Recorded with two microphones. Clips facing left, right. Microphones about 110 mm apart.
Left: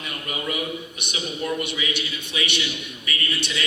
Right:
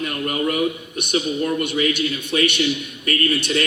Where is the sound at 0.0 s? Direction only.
50° right (ahead or behind).